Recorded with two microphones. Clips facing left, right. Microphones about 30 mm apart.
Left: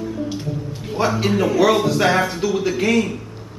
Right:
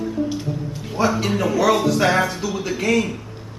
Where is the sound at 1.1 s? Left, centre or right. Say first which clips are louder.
Left 2 dB; centre.